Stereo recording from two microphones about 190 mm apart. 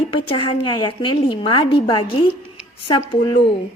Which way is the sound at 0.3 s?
25° left (ahead or behind).